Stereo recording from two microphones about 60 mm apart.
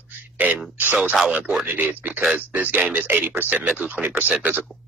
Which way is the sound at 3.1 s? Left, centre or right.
Right.